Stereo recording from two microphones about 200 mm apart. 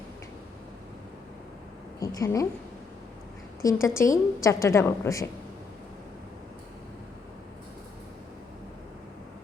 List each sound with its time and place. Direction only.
2.0 s a woman's voice: 15° left (ahead or behind)
3.6 s a woman's voice: 15° left (ahead or behind)